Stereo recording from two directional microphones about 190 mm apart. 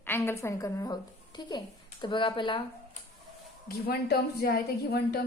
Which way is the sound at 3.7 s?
55° left (ahead or behind).